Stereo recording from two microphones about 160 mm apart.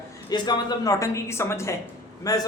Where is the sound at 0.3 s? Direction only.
25° left (ahead or behind).